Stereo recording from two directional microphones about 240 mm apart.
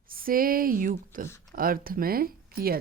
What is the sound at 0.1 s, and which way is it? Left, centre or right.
Speech, right.